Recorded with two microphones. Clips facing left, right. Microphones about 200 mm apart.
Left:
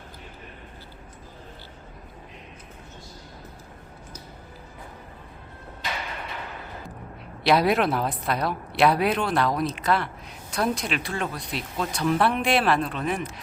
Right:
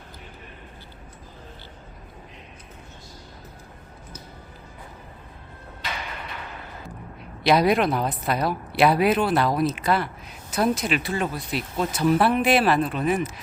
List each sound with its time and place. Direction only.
7.4 s speech: centre (ahead or behind)